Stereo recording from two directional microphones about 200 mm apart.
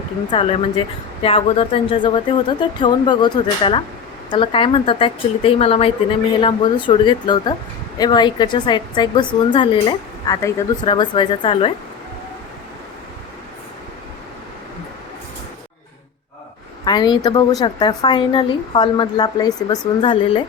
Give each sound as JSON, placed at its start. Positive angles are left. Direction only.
{"t": 0.3, "sound": "a woman's voice", "side_deg": 30}
{"t": 16.8, "sound": "a woman's voice", "side_deg": 20}